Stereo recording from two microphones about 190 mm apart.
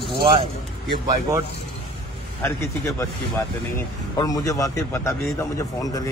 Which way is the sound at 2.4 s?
15° left (ahead or behind).